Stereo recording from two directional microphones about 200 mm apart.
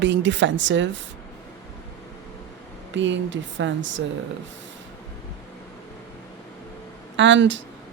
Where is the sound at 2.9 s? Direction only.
65° right (ahead or behind).